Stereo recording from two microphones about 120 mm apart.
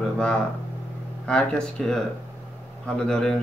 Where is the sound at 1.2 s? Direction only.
5° left (ahead or behind).